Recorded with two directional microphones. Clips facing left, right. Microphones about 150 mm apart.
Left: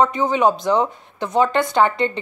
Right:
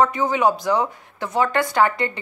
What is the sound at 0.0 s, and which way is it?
Speech, 20° left (ahead or behind).